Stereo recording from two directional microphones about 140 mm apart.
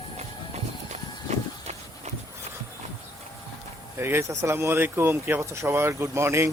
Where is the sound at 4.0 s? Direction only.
15° right (ahead or behind).